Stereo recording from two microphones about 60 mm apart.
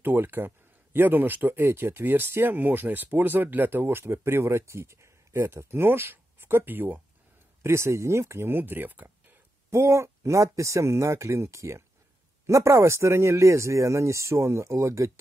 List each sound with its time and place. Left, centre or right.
0.0 s speech: right
7.6 s speech: right
9.7 s speech: right